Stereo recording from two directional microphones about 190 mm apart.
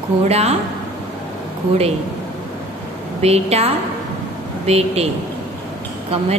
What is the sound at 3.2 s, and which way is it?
A woman's voice, 35° right (ahead or behind).